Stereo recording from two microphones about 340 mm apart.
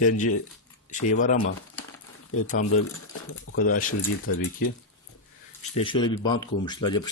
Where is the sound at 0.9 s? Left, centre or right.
Left.